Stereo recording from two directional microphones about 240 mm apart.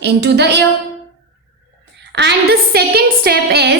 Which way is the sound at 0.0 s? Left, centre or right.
Right.